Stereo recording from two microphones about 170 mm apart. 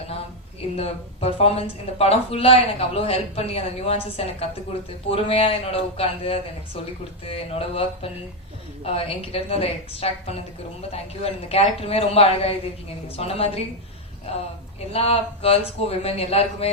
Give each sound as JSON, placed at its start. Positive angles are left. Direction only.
{"t": 0.8, "sound": "speech", "side_deg": 35}